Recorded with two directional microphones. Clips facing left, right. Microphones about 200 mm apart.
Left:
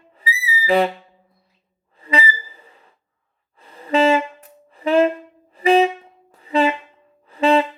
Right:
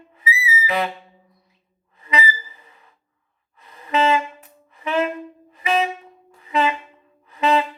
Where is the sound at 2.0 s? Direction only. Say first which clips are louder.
Left 2 dB; 30° left (ahead or behind).